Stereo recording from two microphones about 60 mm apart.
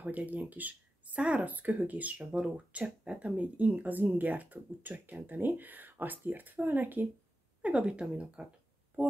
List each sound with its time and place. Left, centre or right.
0.0 s speech: right
7.6 s speech: centre